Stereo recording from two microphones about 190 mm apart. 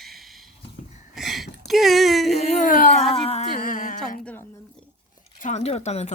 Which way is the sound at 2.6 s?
45° left (ahead or behind).